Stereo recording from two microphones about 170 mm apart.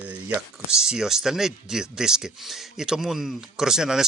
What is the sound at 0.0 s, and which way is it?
Speech, 10° right (ahead or behind).